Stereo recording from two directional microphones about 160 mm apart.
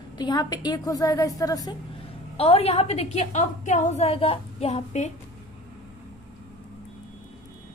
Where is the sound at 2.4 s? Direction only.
40° left (ahead or behind).